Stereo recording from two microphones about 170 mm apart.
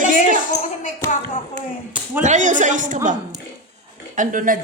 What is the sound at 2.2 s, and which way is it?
Speech, 45° right (ahead or behind).